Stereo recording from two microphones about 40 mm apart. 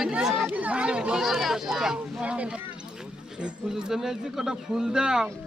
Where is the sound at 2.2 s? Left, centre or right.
Right.